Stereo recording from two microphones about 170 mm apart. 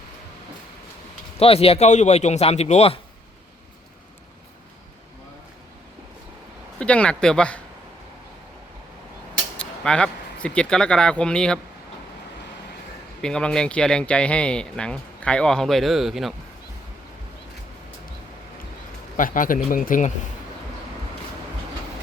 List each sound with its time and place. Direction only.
1.4 s a man's voice: 35° left (ahead or behind)
6.7 s speech: 5° left (ahead or behind)
9.6 s speech: 5° left (ahead or behind)
13.2 s speech: 5° left (ahead or behind)
19.1 s a man's voice: 50° left (ahead or behind)